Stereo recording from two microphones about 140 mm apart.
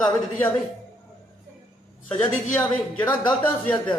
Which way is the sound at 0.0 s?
10° left (ahead or behind).